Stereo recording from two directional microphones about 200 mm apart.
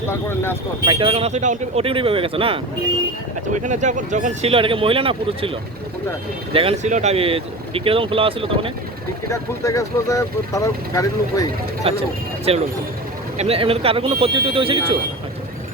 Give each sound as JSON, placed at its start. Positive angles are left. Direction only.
{"t": 0.1, "sound": "speech", "side_deg": 10}
{"t": 0.9, "sound": "speech", "side_deg": -25}
{"t": 6.5, "sound": "speech", "side_deg": -30}
{"t": 9.3, "sound": "speech", "side_deg": 15}
{"t": 11.8, "sound": "speech", "side_deg": -30}